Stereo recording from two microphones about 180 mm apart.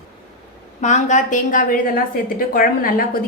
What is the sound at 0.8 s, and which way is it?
A woman's voice, 40° left (ahead or behind).